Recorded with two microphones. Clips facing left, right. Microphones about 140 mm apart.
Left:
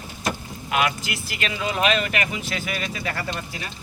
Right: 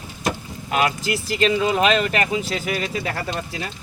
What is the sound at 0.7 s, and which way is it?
Speech, 35° right (ahead or behind).